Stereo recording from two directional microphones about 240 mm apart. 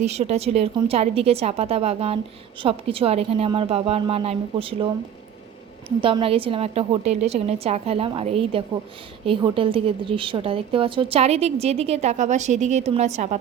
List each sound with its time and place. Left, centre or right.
0.0 s a woman's voice: right
6.0 s a woman's voice: right